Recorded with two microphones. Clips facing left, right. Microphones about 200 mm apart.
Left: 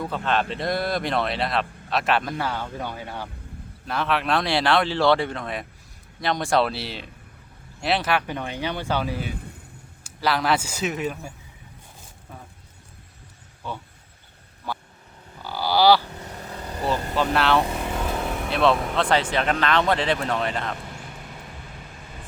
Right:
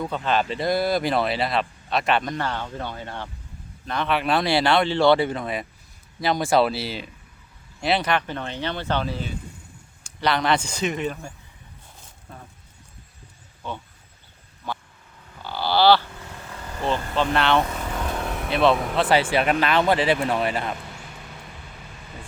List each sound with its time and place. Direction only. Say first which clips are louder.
0.0 s speech: right 1 dB; centre (ahead or behind)
15.4 s a sound: even; 10° left (ahead or behind)
16.2 s vehicle: left 3 dB; 40° left (ahead or behind)
17.2 s speech: even; 5° left (ahead or behind)